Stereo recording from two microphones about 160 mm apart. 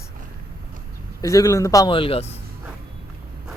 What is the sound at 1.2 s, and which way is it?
Speech, 20° left (ahead or behind).